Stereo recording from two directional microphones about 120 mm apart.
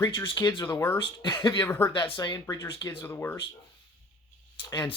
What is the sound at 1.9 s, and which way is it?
Speech, 40° left (ahead or behind).